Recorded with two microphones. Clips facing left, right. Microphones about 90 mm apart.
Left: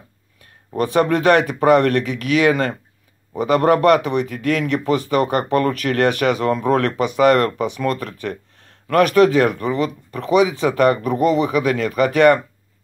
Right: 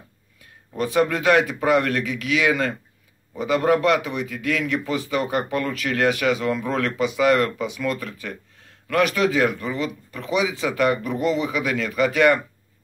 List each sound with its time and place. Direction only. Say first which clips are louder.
0.7 s speech: left 4 dB; 55° left (ahead or behind)